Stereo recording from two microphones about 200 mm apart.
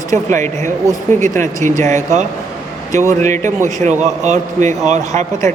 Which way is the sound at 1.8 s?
35° right (ahead or behind).